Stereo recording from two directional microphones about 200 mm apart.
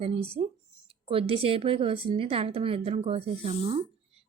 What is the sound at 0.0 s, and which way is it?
Speech, 30° right (ahead or behind).